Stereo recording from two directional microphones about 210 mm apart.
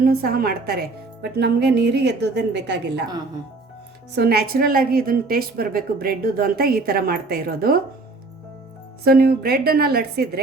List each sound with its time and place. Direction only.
0.0 s a woman's voice: 45° right (ahead or behind)
4.1 s a woman's voice: 50° right (ahead or behind)
9.0 s a woman's voice: 45° right (ahead or behind)